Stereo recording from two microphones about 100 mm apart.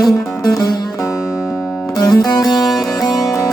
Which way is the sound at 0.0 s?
40° left (ahead or behind).